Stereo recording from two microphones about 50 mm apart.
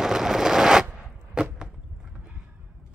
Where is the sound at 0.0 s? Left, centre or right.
Centre.